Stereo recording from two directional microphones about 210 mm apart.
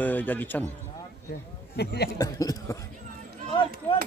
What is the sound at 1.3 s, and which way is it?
Speech, 50° left (ahead or behind).